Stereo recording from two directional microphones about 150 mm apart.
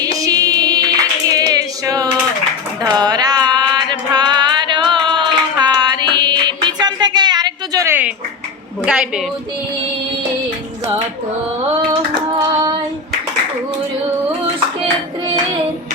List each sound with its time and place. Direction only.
0.0 s singing: 25° right (ahead or behind)
3.0 s music: 25° right (ahead or behind)
8.8 s a woman's voice: 5° right (ahead or behind)